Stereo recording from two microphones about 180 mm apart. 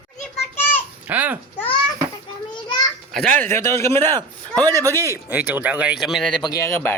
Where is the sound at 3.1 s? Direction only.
5° left (ahead or behind).